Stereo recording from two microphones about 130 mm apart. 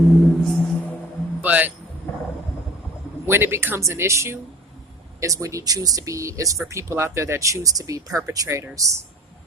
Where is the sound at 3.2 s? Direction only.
15° right (ahead or behind).